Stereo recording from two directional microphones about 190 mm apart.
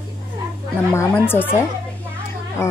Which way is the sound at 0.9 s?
10° left (ahead or behind).